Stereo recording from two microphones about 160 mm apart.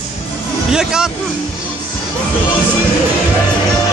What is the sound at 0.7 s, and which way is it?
Speech, 5° right (ahead or behind).